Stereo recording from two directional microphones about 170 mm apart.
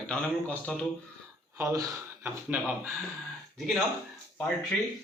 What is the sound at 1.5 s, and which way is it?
Speech, 20° right (ahead or behind).